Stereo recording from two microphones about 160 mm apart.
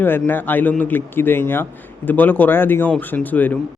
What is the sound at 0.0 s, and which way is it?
A man's voice, 15° left (ahead or behind).